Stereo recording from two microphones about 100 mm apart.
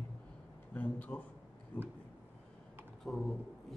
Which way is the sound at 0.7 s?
15° left (ahead or behind).